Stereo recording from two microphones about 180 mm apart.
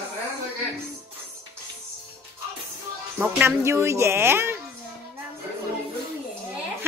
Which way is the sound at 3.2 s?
10° right (ahead or behind).